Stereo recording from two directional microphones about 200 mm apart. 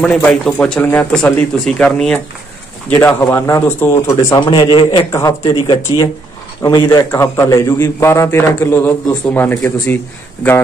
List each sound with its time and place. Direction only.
0.0 s a man's voice: centre (ahead or behind)
4.4 s a man's voice: 25° left (ahead or behind)